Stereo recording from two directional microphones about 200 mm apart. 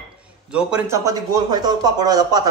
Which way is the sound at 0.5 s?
5° right (ahead or behind).